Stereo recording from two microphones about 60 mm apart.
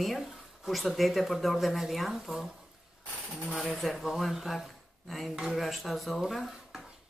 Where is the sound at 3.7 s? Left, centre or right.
Centre.